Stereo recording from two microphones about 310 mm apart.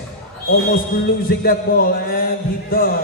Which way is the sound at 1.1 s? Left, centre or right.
Left.